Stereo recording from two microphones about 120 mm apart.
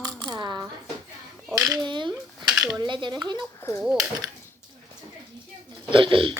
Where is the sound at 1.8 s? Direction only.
40° right (ahead or behind).